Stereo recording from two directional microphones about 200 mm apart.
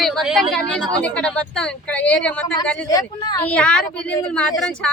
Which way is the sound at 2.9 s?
20° left (ahead or behind).